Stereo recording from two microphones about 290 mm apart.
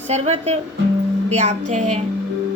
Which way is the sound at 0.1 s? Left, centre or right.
Right.